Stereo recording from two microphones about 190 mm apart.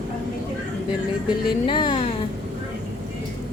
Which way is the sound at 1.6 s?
25° left (ahead or behind).